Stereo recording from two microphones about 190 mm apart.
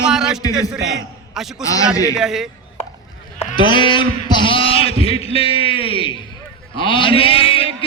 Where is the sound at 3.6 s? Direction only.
25° left (ahead or behind).